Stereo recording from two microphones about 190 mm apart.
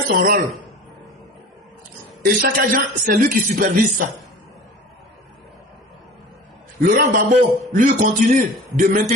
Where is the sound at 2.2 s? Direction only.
50° right (ahead or behind).